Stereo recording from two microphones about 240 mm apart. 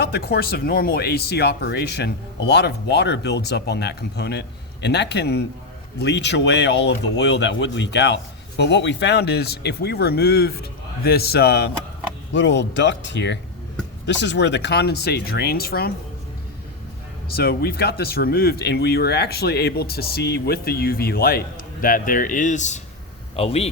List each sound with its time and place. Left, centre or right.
0.0 s speech: left
17.3 s a man's voice: left